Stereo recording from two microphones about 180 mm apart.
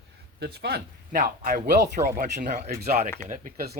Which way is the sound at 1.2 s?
50° right (ahead or behind).